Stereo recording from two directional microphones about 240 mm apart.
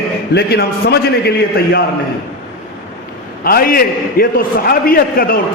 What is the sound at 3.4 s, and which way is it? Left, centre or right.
A man's voice, left.